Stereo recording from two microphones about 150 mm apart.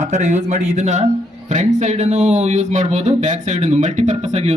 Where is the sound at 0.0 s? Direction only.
50° right (ahead or behind).